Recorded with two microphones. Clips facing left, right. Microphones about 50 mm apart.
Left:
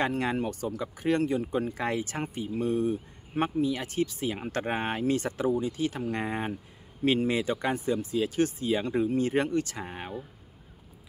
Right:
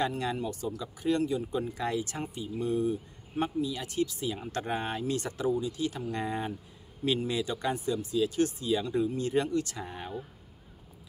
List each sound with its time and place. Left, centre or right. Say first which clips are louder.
0.0 s speech: left 3 dB; left